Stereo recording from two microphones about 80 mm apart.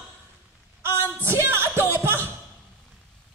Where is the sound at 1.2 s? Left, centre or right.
Right.